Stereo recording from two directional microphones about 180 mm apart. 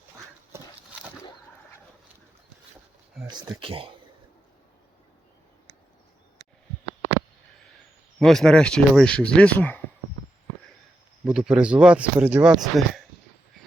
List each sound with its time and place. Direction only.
3.2 s speech: 20° right (ahead or behind)
8.2 s speech: centre (ahead or behind)
11.3 s speech: 5° right (ahead or behind)